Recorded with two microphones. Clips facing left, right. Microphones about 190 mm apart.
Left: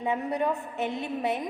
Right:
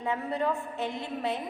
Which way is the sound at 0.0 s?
15° left (ahead or behind).